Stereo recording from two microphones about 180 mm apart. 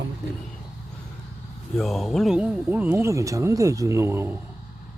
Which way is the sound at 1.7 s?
Centre (ahead or behind).